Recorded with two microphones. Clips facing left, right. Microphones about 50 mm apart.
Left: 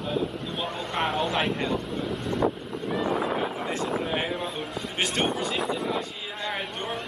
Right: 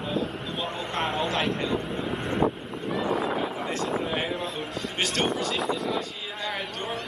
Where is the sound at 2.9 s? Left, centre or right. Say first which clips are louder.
Even; centre.